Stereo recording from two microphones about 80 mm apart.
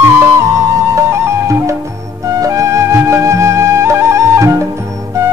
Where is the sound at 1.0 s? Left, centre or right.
Right.